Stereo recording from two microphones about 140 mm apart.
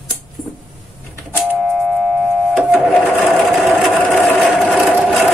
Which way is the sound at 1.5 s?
5° right (ahead or behind).